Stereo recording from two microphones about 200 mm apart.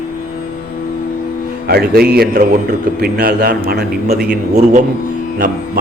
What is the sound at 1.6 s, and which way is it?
A man's voice, 50° right (ahead or behind).